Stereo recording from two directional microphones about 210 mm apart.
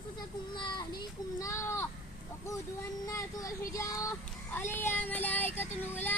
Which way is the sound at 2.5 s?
15° left (ahead or behind).